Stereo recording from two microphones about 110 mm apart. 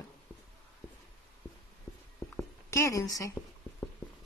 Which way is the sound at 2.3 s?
25° left (ahead or behind).